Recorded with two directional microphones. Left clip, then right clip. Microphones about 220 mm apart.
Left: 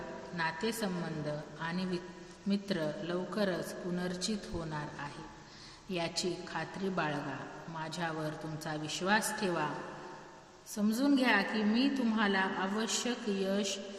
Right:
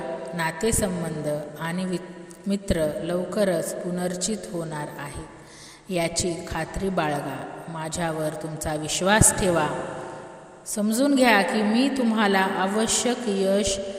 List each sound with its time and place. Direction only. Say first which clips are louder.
0.3 s a woman's voice: right 9 dB; 35° right (ahead or behind)
10.8 s a woman's voice: right 10 dB; 35° right (ahead or behind)